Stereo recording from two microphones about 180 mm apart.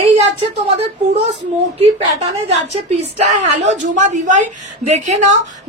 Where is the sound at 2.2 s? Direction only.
35° right (ahead or behind).